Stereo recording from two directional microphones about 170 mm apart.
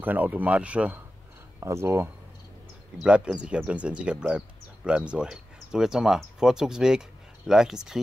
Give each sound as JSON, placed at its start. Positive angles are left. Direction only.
{"t": 0.0, "sound": "speech", "side_deg": -10}
{"t": 3.0, "sound": "speech", "side_deg": -5}